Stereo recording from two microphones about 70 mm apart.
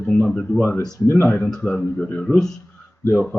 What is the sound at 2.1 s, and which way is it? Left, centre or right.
Speech, centre.